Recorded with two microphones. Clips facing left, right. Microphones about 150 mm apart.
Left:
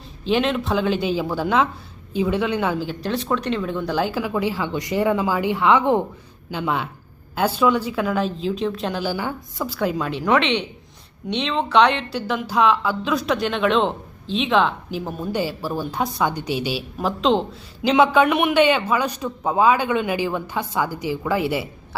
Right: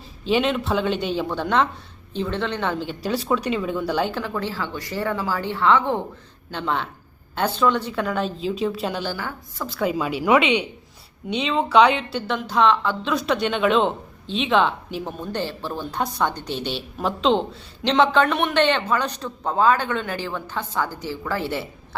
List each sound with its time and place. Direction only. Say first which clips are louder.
0.3 s a woman's voice: left 1 dB; centre (ahead or behind)
9.1 s speech: left 5 dB; 15° left (ahead or behind)
9.6 s a woman's voice: even; centre (ahead or behind)